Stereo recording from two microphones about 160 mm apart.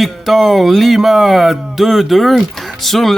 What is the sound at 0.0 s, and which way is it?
Speech, centre (ahead or behind).